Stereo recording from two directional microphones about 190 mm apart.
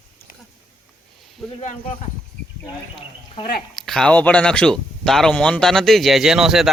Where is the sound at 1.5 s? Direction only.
40° left (ahead or behind).